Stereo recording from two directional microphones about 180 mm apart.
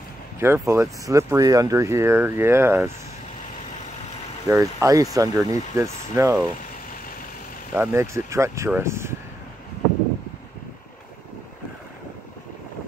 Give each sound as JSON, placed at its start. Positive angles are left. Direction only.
{"t": 0.4, "sound": "speech", "side_deg": -15}
{"t": 4.5, "sound": "speech", "side_deg": -15}
{"t": 7.7, "sound": "speech", "side_deg": -15}